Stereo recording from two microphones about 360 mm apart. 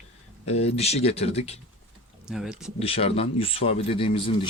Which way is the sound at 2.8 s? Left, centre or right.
Centre.